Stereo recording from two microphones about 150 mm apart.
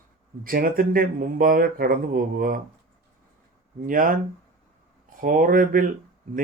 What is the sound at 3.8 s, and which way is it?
Speech, 65° right (ahead or behind).